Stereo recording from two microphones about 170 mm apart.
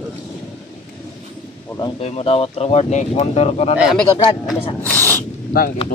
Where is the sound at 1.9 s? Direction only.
40° left (ahead or behind).